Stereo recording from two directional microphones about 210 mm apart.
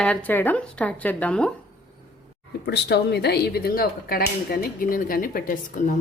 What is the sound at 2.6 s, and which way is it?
Speech, 55° left (ahead or behind).